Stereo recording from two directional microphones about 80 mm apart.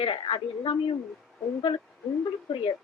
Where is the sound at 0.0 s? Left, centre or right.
Left.